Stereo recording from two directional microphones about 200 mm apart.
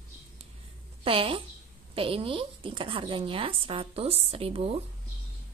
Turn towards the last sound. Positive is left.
turn(degrees=-30)  # may be behind; listen again after turning